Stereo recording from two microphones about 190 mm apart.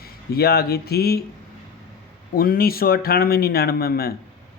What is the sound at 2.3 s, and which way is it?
Speech, 50° left (ahead or behind).